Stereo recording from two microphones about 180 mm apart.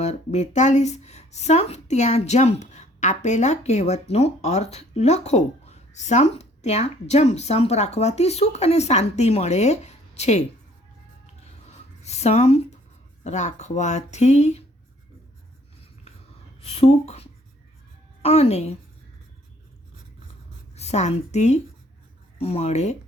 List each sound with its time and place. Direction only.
0.0 s speech: 40° left (ahead or behind)
11.7 s writing: 40° left (ahead or behind)
13.2 s speech: 40° left (ahead or behind)
16.6 s a woman's voice: 35° left (ahead or behind)
20.7 s a woman's voice: 35° left (ahead or behind)